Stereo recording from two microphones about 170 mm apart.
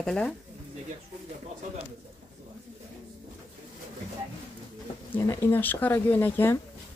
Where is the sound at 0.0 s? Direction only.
5° left (ahead or behind).